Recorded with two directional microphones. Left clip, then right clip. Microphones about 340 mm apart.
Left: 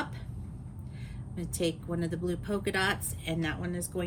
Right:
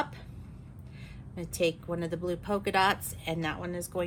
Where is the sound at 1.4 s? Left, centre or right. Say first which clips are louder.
Right 3 dB; centre.